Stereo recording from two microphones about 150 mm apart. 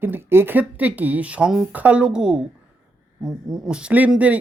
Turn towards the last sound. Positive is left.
turn(degrees=-10)  # may be behind; listen again after turning